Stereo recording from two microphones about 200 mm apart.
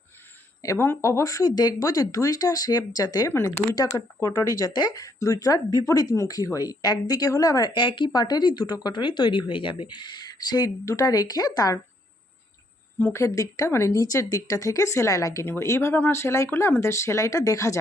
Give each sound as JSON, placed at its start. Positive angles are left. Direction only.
{"t": 0.6, "sound": "speech", "side_deg": 15}
{"t": 13.0, "sound": "speech", "side_deg": 10}